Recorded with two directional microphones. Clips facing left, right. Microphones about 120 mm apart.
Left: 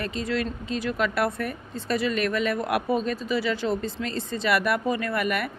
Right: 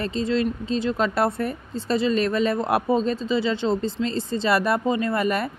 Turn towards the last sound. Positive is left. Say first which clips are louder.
# right 3 dB
turn(degrees=-30)  # may be behind; listen again after turning